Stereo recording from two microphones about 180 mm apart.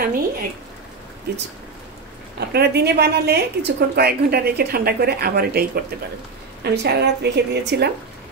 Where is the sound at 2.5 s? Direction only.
65° right (ahead or behind).